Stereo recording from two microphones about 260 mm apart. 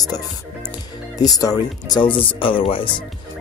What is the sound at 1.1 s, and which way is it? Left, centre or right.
Speech, centre.